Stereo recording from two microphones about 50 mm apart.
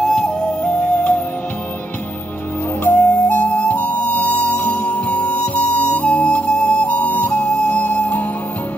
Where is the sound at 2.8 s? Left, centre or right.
Left.